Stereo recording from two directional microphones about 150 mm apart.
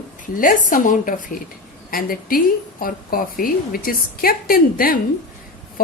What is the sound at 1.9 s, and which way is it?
A woman's voice, 75° left (ahead or behind).